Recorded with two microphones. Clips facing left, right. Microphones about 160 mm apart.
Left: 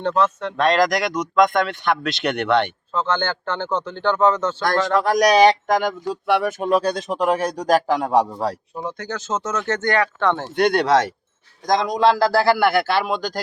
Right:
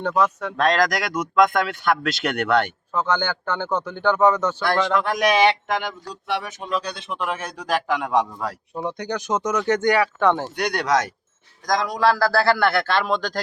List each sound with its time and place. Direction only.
0.0 s speech: 10° right (ahead or behind)
2.9 s speech: 10° right (ahead or behind)
4.6 s speech: 40° left (ahead or behind)
8.9 s speech: 15° right (ahead or behind)
10.5 s a man's voice: 25° left (ahead or behind); by 13.4 s 5° left (ahead or behind)